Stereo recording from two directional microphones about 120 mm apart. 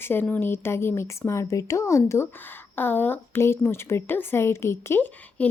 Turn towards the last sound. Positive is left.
turn(degrees=15)  # may be behind; listen again after turning